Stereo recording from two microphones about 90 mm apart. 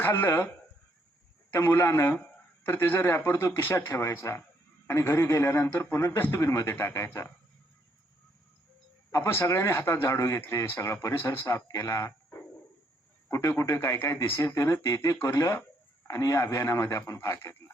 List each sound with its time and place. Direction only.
0.0 s speech: 25° left (ahead or behind)
1.5 s speech: 25° left (ahead or behind)
9.1 s speech: 30° left (ahead or behind)
13.3 s speech: 35° left (ahead or behind)